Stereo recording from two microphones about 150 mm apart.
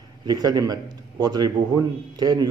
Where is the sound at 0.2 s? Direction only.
25° right (ahead or behind).